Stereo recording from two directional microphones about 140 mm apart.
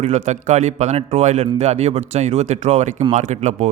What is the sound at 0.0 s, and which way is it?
A man's voice, 55° right (ahead or behind).